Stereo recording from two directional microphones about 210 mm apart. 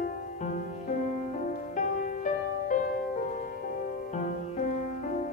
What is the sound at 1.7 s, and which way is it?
Music, 40° left (ahead or behind).